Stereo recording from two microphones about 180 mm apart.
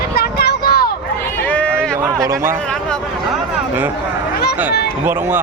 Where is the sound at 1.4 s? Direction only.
10° left (ahead or behind).